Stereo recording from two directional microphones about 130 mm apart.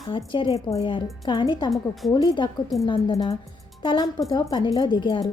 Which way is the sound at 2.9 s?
45° left (ahead or behind).